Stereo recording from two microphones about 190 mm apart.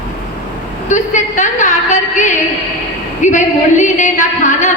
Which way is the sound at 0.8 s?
40° left (ahead or behind).